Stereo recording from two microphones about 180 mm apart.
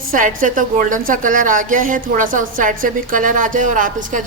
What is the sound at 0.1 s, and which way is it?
A woman's voice, 50° right (ahead or behind).